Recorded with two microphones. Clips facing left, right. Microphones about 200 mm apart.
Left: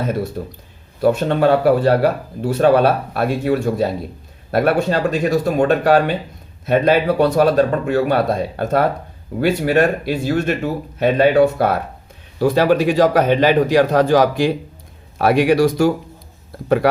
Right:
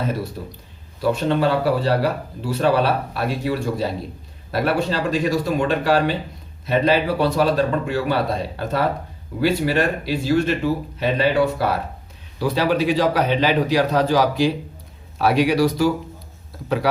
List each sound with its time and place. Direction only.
0.4 s a man's voice: 55° left (ahead or behind)